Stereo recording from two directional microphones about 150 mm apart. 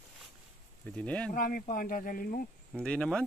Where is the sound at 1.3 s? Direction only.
70° left (ahead or behind).